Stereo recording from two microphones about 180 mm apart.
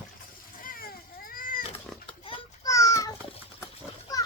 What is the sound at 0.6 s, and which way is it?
Vehicle, 50° left (ahead or behind).